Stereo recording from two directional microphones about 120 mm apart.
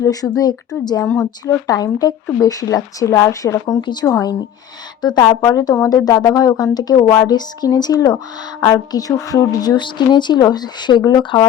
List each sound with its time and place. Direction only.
0.0 s a woman's voice: 30° left (ahead or behind)
1.0 s speech: 20° left (ahead or behind)
1.6 s a woman's voice: 30° left (ahead or behind)
5.0 s a woman's voice: 35° left (ahead or behind)